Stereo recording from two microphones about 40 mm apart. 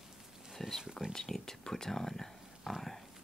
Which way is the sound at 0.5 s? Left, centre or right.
Centre.